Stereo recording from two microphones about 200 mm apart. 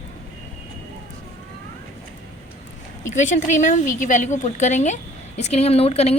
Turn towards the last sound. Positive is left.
turn(degrees=30)  # may be behind; listen again after turning